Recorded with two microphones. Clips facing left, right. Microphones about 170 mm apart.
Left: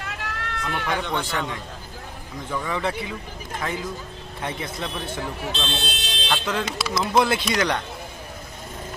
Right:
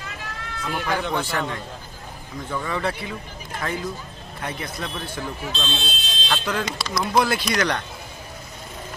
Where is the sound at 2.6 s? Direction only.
15° left (ahead or behind).